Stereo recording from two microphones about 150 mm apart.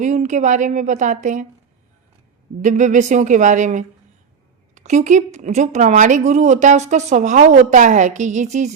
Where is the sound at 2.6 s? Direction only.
55° right (ahead or behind).